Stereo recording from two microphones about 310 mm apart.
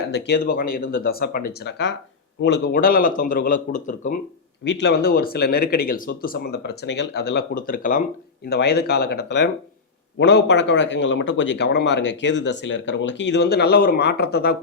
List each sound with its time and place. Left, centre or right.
0.3 s speech: left